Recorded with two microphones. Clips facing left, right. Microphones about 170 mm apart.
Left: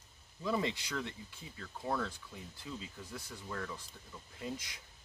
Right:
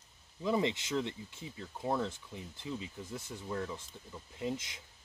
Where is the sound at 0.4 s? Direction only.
20° right (ahead or behind).